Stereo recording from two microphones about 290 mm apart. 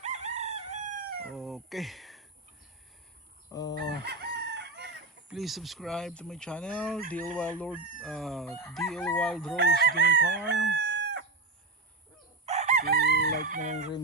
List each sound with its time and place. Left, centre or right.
0.0 s chicken: right
1.2 s speech: centre
3.5 s chicken: centre
4.0 s chicken: right
5.3 s speech: centre
9.6 s chicken: right
10.8 s chicken: left
12.5 s chicken: right
13.0 s chicken: left
13.4 s chicken: right